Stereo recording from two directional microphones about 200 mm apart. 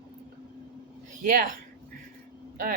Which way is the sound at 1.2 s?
40° right (ahead or behind).